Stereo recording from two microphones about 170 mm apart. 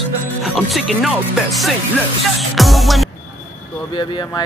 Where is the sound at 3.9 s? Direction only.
25° left (ahead or behind).